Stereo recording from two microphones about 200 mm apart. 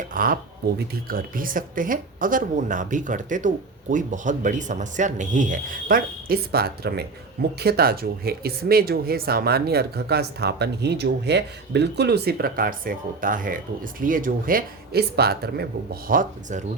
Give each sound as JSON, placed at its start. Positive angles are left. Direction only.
{"t": 0.1, "sound": "speech", "side_deg": -45}
{"t": 16.0, "sound": "speech", "side_deg": -40}